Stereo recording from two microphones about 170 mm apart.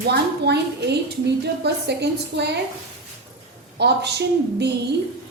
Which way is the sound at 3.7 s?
80° right.